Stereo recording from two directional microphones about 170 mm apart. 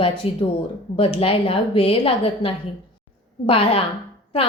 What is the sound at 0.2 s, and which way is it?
A woman's voice, 35° left (ahead or behind).